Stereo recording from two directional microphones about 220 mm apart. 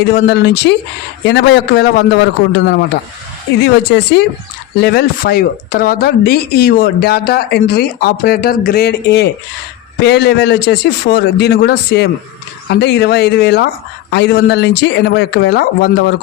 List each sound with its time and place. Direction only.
0.0 s speech: 50° left (ahead or behind)